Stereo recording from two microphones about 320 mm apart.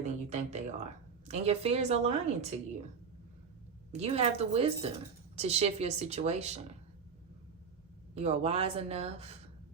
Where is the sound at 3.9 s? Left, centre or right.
Centre.